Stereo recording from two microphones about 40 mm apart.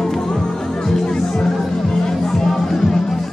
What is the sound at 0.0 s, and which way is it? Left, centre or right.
Music, centre.